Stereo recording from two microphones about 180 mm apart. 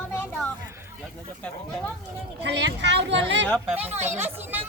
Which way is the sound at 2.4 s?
75° right (ahead or behind).